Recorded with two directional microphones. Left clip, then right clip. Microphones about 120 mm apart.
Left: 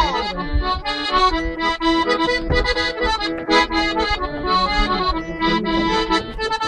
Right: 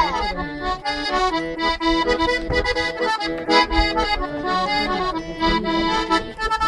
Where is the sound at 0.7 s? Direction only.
45° right (ahead or behind).